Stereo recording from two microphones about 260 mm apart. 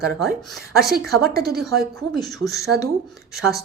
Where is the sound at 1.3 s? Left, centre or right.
Right.